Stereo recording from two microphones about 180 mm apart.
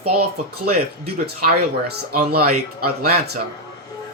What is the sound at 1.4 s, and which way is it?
Speech, 60° right (ahead or behind).